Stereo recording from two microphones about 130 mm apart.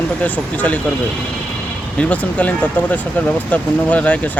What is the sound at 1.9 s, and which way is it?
Speech, 10° left (ahead or behind).